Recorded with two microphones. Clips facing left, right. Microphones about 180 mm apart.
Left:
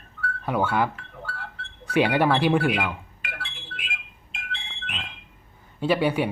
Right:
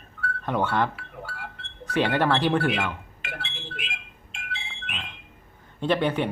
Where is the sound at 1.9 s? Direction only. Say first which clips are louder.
Left 2 dB; 10° left (ahead or behind).